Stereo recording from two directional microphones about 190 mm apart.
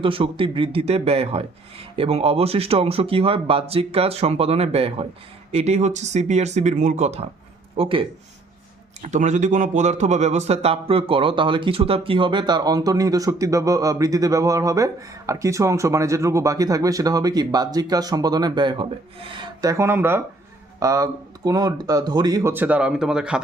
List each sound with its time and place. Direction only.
0.0 s a man's voice: 30° right (ahead or behind)
9.0 s a man's voice: 40° right (ahead or behind); by 23.4 s 5° right (ahead or behind)